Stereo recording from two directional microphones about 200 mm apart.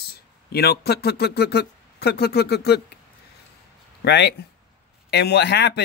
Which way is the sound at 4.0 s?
55° left (ahead or behind).